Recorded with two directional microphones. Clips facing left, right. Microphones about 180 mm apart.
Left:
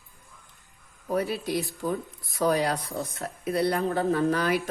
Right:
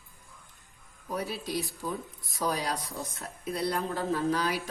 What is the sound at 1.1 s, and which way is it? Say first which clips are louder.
Speech: left 6 dB; 60° left (ahead or behind).